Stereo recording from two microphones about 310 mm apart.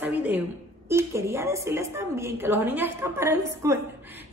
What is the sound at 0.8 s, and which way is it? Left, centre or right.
A woman's voice, centre.